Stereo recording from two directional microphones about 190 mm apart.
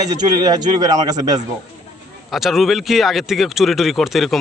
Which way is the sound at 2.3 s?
Centre (ahead or behind).